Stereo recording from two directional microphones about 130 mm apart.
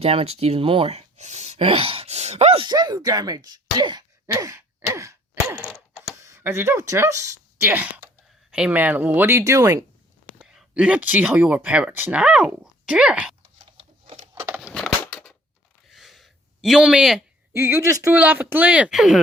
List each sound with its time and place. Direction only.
0.0 s speech: 50° right (ahead or behind)
2.6 s speech: 30° right (ahead or behind)
4.3 s sigh: 25° right (ahead or behind)
6.1 s speech: 20° right (ahead or behind)
10.3 s speech: 5° right (ahead or behind)
14.6 s a sound: 5° left (ahead or behind)
17.5 s speech: 20° right (ahead or behind)
18.1 s speech: 10° right (ahead or behind)